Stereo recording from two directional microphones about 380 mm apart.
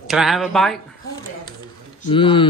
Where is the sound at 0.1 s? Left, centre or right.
Centre.